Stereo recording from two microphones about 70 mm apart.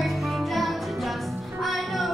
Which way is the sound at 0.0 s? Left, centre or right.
Centre.